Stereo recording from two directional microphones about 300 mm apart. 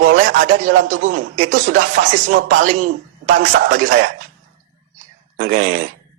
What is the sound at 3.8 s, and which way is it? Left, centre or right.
Speech, right.